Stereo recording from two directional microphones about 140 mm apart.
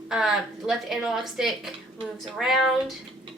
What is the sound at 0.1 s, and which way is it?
Speech, 5° right (ahead or behind).